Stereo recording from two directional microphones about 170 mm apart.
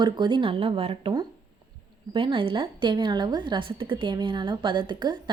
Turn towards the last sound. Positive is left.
turn(degrees=-25)  # may be behind; listen again after turning